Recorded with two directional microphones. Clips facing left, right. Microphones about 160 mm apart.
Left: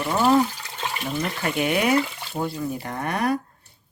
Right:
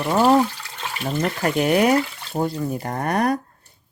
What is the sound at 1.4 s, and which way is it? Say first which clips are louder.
Speech: right 5 dB; 40° right (ahead or behind).